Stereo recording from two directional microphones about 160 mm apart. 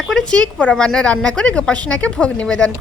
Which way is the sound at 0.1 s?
5° left (ahead or behind).